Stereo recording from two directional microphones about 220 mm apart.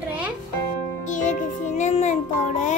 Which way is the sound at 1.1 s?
35° left (ahead or behind).